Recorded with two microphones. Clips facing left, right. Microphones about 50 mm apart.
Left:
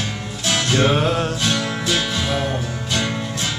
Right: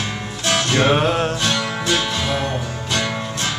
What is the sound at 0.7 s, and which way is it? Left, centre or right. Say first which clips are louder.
Music: right 1 dB; centre.